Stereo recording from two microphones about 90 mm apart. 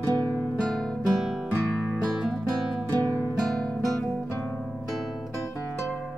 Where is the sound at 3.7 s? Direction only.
5° left (ahead or behind).